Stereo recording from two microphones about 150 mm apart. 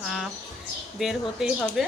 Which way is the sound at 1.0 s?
Centre (ahead or behind).